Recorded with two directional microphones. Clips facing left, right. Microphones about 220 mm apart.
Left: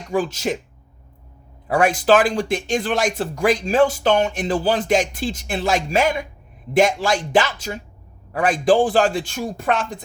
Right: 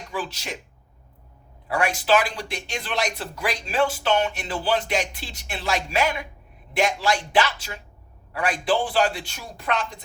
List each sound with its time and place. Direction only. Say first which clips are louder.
0.1 s speech: left 11 dB; 45° left (ahead or behind)
1.7 s speech: left 6 dB; 45° left (ahead or behind)